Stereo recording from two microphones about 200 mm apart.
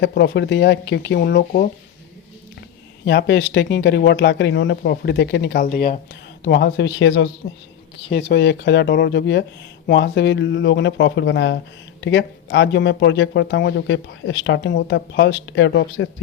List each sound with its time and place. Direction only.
0.0 s speech: 60° left (ahead or behind)
3.0 s speech: 55° left (ahead or behind)